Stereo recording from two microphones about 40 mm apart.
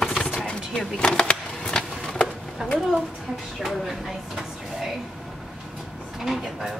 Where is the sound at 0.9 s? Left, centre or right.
Left.